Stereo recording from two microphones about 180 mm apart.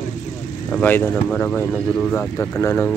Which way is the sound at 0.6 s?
10° left (ahead or behind).